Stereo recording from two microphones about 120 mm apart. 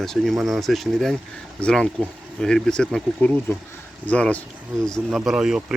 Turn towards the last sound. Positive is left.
turn(degrees=-5)  # may be behind; listen again after turning